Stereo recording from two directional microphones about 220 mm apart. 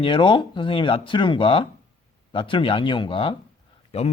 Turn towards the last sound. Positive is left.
turn(degrees=25)  # may be behind; listen again after turning